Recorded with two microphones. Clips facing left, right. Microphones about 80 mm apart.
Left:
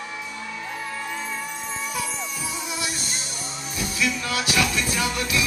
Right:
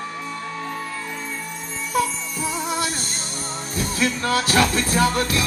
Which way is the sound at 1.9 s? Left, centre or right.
Right.